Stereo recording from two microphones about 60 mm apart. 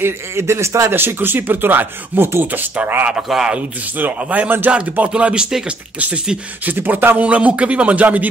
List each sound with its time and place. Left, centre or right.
0.0 s a man's voice: right
0.9 s speech: right
3.2 s speech: centre
3.5 s speech: right
5.1 s speech: centre
6.6 s speech: right